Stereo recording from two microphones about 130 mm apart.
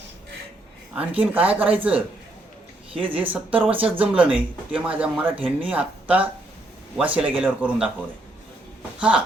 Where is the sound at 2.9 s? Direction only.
45° right (ahead or behind).